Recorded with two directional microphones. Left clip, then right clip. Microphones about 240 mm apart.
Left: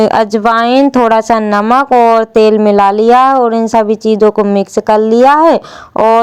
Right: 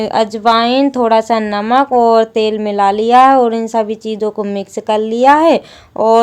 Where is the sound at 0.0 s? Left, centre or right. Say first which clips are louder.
Left 4 dB; left.